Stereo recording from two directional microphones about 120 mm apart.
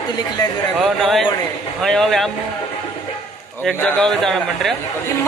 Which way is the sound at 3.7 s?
5° left (ahead or behind).